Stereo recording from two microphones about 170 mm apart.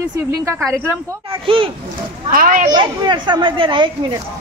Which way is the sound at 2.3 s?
55° right (ahead or behind).